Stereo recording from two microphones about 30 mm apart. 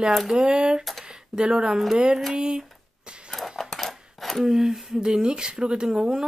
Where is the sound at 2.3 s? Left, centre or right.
Right.